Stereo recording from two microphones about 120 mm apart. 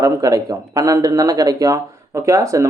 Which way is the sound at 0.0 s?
30° right (ahead or behind).